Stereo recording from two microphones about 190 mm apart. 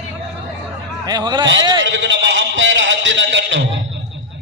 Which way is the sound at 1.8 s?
70° right (ahead or behind).